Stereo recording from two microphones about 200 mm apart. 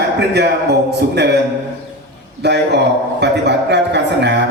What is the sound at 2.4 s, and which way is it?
A man's voice, 55° right (ahead or behind).